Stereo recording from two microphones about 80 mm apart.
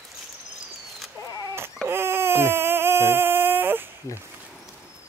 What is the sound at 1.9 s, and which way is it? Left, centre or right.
Baby cry, right.